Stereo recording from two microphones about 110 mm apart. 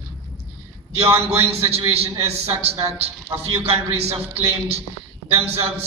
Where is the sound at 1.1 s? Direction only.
65° right (ahead or behind).